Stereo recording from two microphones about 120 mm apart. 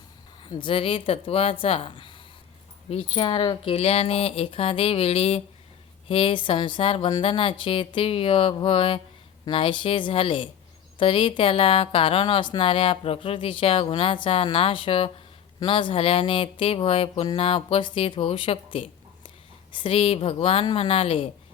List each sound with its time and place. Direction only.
0.4 s a woman's voice: 45° left (ahead or behind)
3.6 s a woman's voice: 55° left (ahead or behind)